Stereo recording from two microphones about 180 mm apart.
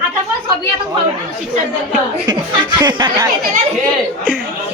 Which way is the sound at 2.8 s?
25° right (ahead or behind).